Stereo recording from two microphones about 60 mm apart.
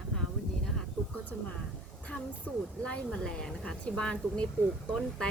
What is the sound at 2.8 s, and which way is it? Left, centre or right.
Speech, centre.